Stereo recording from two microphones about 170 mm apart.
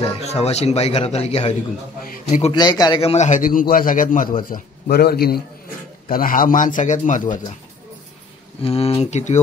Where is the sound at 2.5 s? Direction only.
25° left (ahead or behind); by 7.2 s 50° left (ahead or behind).